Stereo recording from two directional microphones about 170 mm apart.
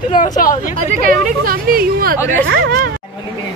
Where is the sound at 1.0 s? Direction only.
60° right (ahead or behind).